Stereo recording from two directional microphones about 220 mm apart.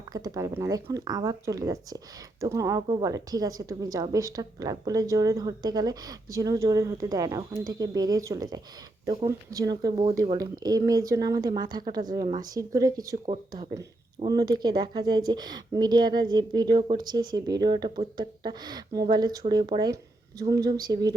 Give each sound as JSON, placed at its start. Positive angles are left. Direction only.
{"t": 0.1, "sound": "a woman's voice", "side_deg": -15}